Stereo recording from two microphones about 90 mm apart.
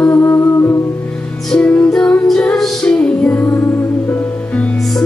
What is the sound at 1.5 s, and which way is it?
Music, 15° left (ahead or behind).